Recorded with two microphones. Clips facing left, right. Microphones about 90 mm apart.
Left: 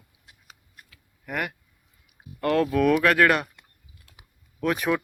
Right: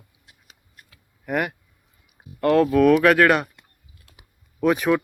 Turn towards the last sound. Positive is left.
turn(degrees=0)  # may be behind; listen again after turning